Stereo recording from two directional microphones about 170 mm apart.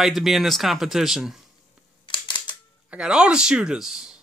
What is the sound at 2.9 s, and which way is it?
A man's voice, 5° right (ahead or behind).